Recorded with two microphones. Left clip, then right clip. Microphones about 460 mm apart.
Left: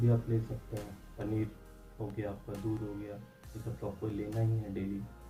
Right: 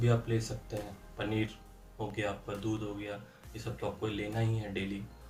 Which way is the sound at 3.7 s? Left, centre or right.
Right.